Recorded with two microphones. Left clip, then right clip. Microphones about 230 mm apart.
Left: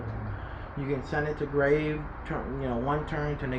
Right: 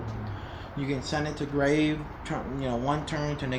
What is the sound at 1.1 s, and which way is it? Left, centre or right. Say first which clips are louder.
Speech: left 2 dB; right.